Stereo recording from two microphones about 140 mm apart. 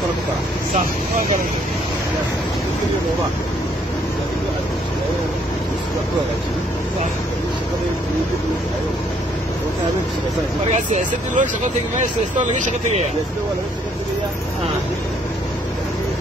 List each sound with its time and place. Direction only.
10.7 s speech: 60° right (ahead or behind)